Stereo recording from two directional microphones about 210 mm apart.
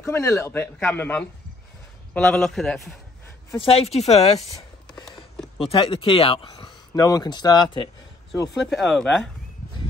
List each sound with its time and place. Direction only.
0.0 s a man's voice: 15° left (ahead or behind)
3.6 s speech: 30° left (ahead or behind)
5.6 s speech: 25° left (ahead or behind)
8.6 s a man's voice: centre (ahead or behind)